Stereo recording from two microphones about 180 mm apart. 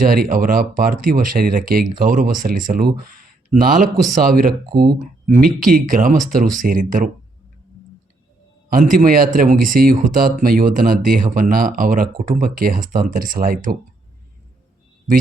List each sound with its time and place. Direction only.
0.0 s speech: 50° right (ahead or behind)
8.9 s speech: 50° right (ahead or behind)